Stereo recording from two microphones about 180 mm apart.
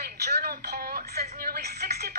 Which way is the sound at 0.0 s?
60° right (ahead or behind).